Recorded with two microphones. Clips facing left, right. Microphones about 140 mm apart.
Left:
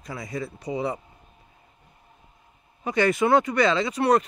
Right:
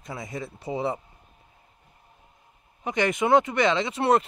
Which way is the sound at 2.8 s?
20° right (ahead or behind).